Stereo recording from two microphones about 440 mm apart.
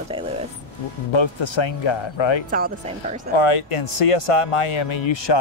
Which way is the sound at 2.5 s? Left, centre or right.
Centre.